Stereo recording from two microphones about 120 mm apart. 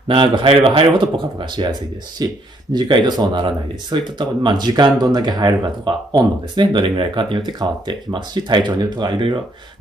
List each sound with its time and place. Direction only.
0.4 s speech: 50° right (ahead or behind)